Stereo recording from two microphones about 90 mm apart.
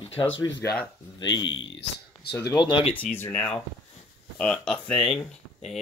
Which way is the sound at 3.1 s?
20° left (ahead or behind).